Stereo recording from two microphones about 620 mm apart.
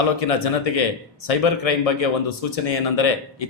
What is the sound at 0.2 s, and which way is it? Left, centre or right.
Speech, left.